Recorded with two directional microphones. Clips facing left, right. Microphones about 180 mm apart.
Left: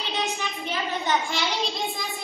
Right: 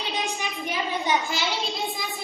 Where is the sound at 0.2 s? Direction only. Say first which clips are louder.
Left 1 dB; 10° right (ahead or behind).